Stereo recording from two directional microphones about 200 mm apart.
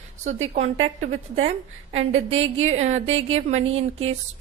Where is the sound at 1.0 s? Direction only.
35° right (ahead or behind).